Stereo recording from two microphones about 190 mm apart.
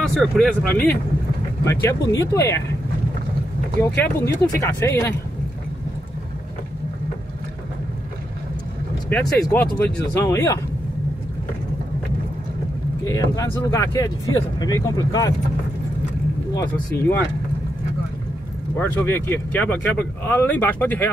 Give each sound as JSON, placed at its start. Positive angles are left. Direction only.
{"t": 0.1, "sound": "speech", "side_deg": 0}
{"t": 3.8, "sound": "speech", "side_deg": 15}
{"t": 9.1, "sound": "speech", "side_deg": 10}
{"t": 13.0, "sound": "speech", "side_deg": 20}
{"t": 18.8, "sound": "speech", "side_deg": 10}